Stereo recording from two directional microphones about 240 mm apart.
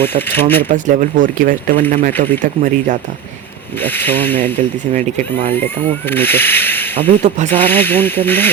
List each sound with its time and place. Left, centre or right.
0.0 s speech: centre
0.7 s speech: right
2.1 s speech: centre
2.4 s speech: right
3.8 s speech: centre
7.1 s speech: right
7.5 s speech: centre